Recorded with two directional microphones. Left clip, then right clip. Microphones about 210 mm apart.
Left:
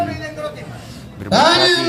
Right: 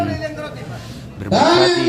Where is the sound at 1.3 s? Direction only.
25° left (ahead or behind).